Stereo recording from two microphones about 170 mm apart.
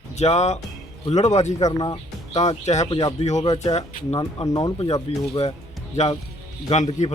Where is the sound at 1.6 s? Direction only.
25° left (ahead or behind).